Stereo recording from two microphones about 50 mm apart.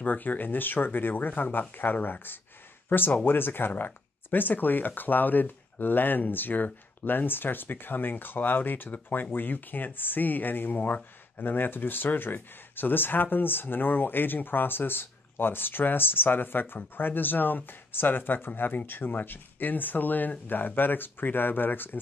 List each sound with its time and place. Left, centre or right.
0.0 s speech: left